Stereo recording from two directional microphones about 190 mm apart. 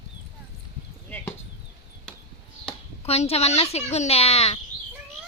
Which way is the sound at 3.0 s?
35° left (ahead or behind).